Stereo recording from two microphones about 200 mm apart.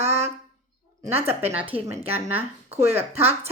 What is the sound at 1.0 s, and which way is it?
Speech, 10° right (ahead or behind).